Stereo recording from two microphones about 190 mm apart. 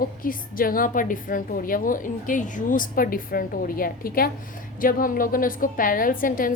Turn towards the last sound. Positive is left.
turn(degrees=45)  # may be behind; listen again after turning